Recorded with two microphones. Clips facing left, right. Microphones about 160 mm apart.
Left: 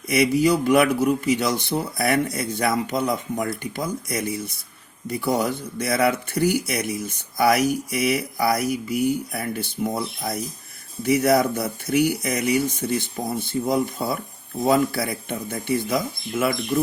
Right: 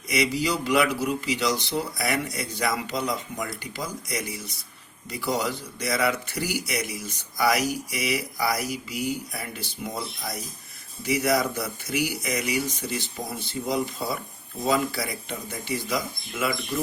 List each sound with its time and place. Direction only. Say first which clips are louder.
0.1 s a man's voice: left 7 dB; 55° left (ahead or behind)